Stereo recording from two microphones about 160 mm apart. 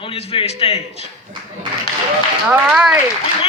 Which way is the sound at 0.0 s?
40° left (ahead or behind).